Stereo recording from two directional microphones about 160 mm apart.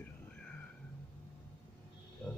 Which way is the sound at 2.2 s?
5° left (ahead or behind).